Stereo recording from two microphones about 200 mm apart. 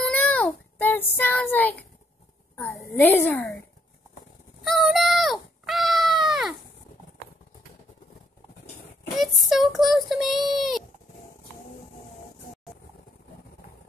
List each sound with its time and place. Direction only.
0.1 s child singing: 10° left (ahead or behind)
2.5 s a child's voice: 10° left (ahead or behind)
4.6 s cat: centre (ahead or behind)
9.2 s child singing: centre (ahead or behind)